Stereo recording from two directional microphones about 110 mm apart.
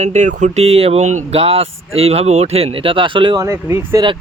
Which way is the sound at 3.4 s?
25° right (ahead or behind).